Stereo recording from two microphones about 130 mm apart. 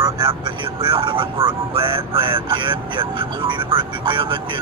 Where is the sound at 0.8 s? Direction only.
40° right (ahead or behind).